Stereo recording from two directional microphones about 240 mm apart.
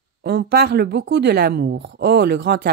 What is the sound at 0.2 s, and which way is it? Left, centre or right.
A woman's voice, right.